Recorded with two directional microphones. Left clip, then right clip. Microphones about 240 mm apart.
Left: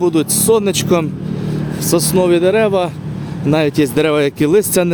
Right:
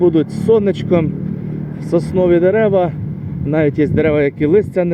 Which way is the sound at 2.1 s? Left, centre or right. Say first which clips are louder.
Even; left.